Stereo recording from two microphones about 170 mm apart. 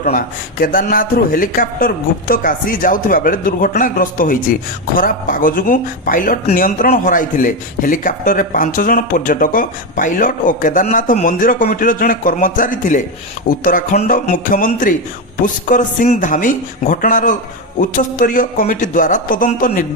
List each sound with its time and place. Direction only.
0.0 s a man's voice: 50° left (ahead or behind)